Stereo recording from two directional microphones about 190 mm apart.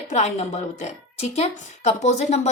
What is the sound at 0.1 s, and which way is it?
A woman's voice, 35° left (ahead or behind).